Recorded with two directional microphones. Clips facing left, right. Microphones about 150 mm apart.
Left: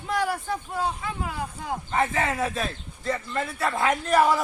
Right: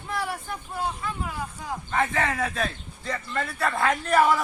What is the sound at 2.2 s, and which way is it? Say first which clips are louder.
Speech: left 1 dB; 5° left (ahead or behind).